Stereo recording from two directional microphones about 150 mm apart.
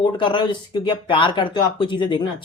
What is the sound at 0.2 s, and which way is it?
Speech, 35° left (ahead or behind).